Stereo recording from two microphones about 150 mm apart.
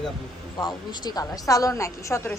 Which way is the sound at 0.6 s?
25° left (ahead or behind).